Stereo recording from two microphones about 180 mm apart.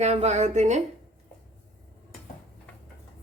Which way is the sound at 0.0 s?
40° right (ahead or behind).